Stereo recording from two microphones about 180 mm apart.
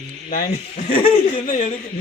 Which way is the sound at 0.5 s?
30° left (ahead or behind).